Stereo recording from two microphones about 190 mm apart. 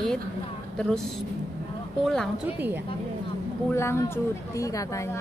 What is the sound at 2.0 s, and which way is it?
Speech, centre (ahead or behind).